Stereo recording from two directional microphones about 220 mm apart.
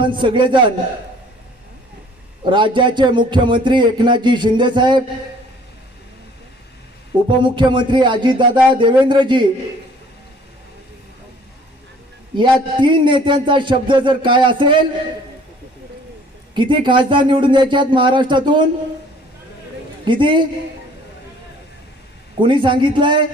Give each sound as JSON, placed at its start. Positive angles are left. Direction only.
{"t": 0.0, "sound": "speech", "side_deg": -20}
{"t": 2.4, "sound": "speech", "side_deg": -20}
{"t": 7.3, "sound": "speech", "side_deg": -20}
{"t": 12.4, "sound": "speech", "side_deg": -20}
{"t": 16.6, "sound": "speech", "side_deg": -20}
{"t": 20.1, "sound": "speech", "side_deg": -20}
{"t": 22.4, "sound": "speech", "side_deg": -20}